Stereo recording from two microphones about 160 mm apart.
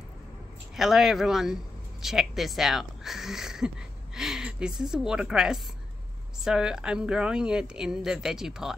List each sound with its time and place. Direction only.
0.7 s a woman's voice: centre (ahead or behind)